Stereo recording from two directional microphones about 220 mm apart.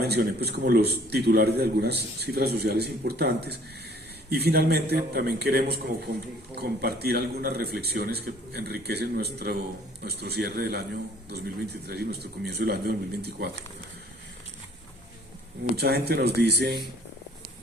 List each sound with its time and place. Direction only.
0.0 s a man's voice: 45° right (ahead or behind)
15.7 s a man's voice: 45° right (ahead or behind)